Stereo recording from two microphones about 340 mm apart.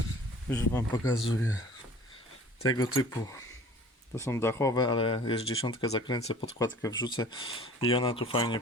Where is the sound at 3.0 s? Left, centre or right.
Centre.